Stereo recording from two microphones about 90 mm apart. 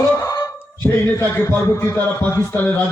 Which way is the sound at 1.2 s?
25° left (ahead or behind).